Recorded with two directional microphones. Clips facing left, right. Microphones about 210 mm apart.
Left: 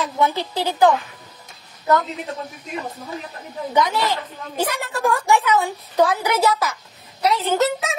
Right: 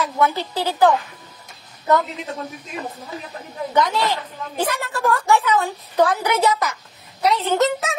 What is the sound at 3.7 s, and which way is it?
A woman's voice, 10° left (ahead or behind).